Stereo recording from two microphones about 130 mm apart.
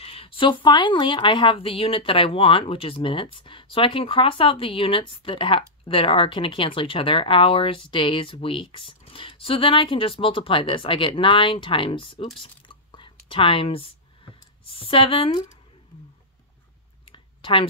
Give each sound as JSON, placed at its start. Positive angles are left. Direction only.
{"t": 0.0, "sound": "speech", "side_deg": 45}
{"t": 12.6, "sound": "a sound", "side_deg": 40}
{"t": 17.0, "sound": "clicking", "side_deg": 40}